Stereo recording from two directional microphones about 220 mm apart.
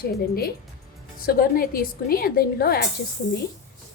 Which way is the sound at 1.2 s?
40° left (ahead or behind).